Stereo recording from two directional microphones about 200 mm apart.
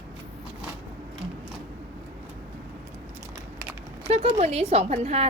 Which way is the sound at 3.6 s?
10° right (ahead or behind).